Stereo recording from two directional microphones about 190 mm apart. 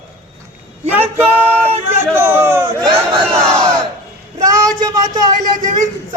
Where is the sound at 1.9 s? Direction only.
10° right (ahead or behind).